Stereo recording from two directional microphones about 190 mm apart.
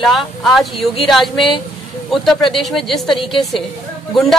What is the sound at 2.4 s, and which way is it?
Speech, 25° left (ahead or behind).